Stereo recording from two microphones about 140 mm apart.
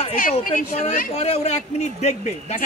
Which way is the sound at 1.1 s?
50° left (ahead or behind).